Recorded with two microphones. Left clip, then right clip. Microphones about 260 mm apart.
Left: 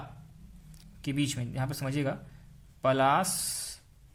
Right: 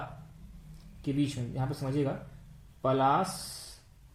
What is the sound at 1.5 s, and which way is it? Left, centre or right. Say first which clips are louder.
Speech: right 3 dB; left.